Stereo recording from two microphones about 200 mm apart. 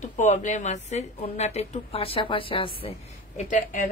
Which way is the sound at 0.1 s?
35° left (ahead or behind).